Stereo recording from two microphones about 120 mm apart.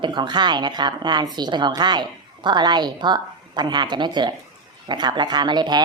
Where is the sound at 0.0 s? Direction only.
40° right (ahead or behind).